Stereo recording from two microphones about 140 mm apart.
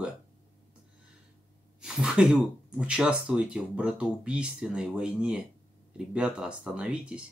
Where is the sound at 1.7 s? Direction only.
5° right (ahead or behind).